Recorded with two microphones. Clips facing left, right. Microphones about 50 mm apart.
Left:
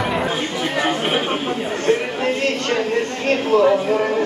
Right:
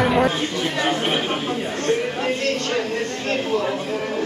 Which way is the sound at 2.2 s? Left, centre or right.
Left.